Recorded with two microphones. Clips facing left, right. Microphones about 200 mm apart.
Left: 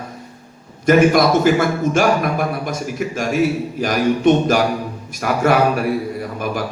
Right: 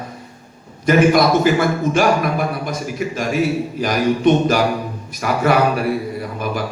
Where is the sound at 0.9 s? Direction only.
50° left (ahead or behind).